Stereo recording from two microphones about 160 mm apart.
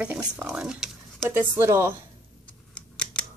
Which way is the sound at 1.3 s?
15° right (ahead or behind).